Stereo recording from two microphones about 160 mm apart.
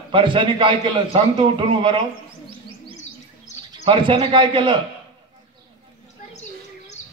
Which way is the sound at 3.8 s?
35° right (ahead or behind).